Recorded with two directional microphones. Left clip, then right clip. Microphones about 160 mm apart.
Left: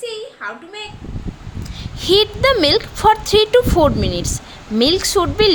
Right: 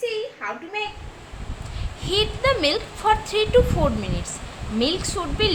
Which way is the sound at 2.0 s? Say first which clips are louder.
Left 8 dB; 55° left (ahead or behind).